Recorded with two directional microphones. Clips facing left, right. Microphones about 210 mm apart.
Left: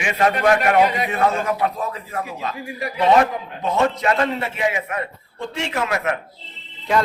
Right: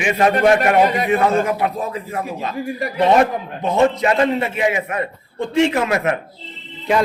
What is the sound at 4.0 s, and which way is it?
Speech, 15° right (ahead or behind).